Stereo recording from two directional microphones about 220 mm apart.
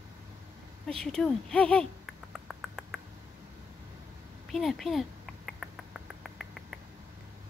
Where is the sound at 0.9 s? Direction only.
5° left (ahead or behind).